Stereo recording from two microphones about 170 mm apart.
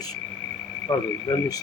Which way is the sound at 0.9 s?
25° left (ahead or behind).